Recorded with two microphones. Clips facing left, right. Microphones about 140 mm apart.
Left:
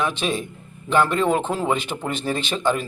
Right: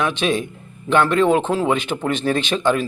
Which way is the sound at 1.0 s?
5° left (ahead or behind).